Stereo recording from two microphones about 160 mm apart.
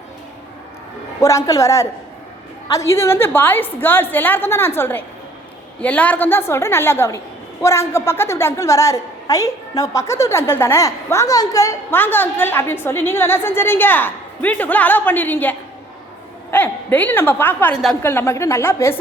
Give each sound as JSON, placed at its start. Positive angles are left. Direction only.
{"t": 1.2, "sound": "a woman's voice", "side_deg": 20}